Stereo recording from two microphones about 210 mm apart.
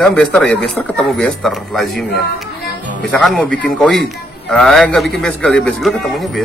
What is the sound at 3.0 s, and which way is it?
Speech, 5° left (ahead or behind).